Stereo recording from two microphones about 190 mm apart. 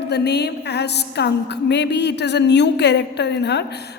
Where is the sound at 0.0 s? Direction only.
60° left (ahead or behind).